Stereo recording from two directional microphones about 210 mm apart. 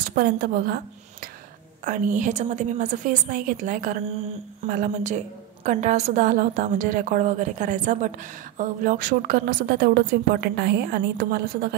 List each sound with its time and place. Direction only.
0.0 s a woman's voice: 45° right (ahead or behind)
1.9 s a woman's voice: 40° right (ahead or behind)